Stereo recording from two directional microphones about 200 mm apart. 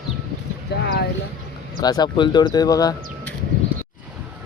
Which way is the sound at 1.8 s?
20° left (ahead or behind).